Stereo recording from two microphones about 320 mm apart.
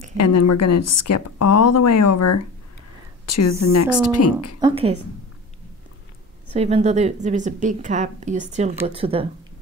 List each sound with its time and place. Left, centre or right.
0.2 s speech: left
4.6 s speech: centre
6.5 s a woman's voice: centre